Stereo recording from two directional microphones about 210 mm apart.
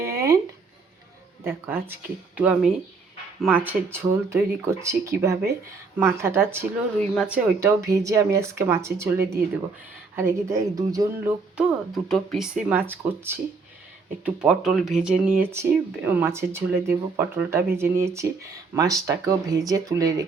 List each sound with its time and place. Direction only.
0.0 s a sound: 15° right (ahead or behind)
1.5 s speech: 10° right (ahead or behind)
11.5 s speech: centre (ahead or behind); by 20.2 s 15° right (ahead or behind)